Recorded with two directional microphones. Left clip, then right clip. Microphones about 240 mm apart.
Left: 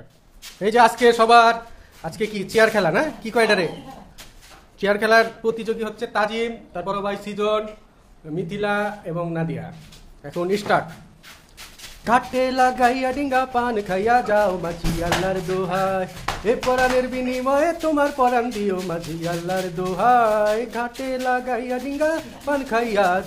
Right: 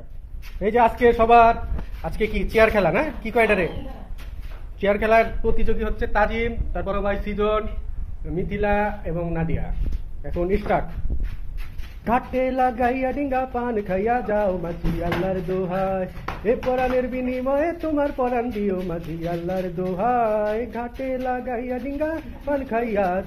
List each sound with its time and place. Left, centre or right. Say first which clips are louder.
0.6 s a man's voice: left 2 dB; left
4.7 s speech: left 1 dB; left
10.3 s speech: left 2 dB; centre
12.0 s speech: left 3 dB; centre